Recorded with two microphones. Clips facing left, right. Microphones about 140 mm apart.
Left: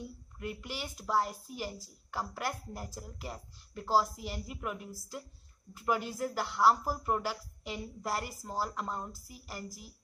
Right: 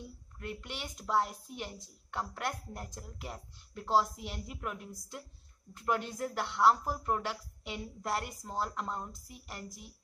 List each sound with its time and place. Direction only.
0.4 s a woman's voice: 5° left (ahead or behind)